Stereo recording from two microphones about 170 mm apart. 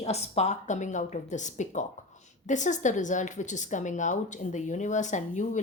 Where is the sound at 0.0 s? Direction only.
40° left (ahead or behind).